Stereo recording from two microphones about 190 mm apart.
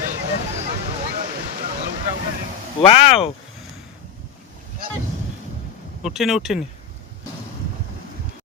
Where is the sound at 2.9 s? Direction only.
30° left (ahead or behind).